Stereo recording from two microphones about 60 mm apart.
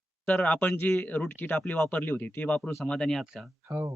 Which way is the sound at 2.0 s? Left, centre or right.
Left.